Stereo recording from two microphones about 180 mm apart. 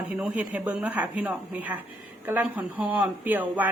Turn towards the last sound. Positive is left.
turn(degrees=-10)  # may be behind; listen again after turning